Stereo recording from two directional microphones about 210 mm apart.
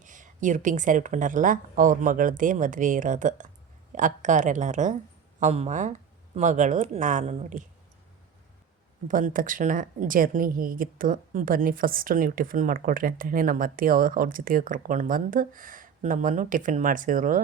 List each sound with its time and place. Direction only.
0.0 s a woman's voice: 35° right (ahead or behind)
9.0 s a woman's voice: 40° right (ahead or behind)